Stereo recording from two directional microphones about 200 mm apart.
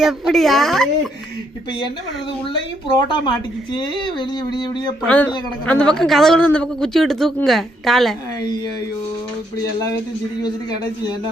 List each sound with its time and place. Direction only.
0.0 s speech: centre (ahead or behind)
3.1 s speech: 25° left (ahead or behind)
5.0 s speech: 5° left (ahead or behind)
10.4 s speech: 20° left (ahead or behind)